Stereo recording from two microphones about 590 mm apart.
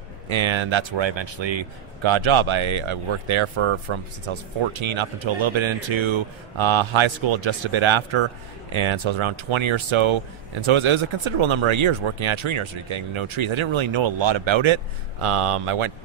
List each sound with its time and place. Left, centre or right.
0.3 s a man's voice: right